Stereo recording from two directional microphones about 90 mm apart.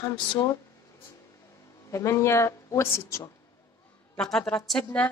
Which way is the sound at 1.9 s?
35° left (ahead or behind).